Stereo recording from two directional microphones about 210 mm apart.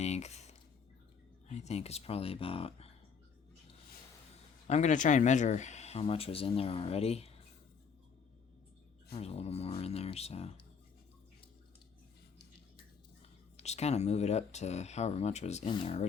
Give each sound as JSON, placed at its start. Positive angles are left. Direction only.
{"t": 0.0, "sound": "speech", "side_deg": 30}
{"t": 4.7, "sound": "speech", "side_deg": 35}
{"t": 9.1, "sound": "speech", "side_deg": 30}
{"t": 13.6, "sound": "speech", "side_deg": 30}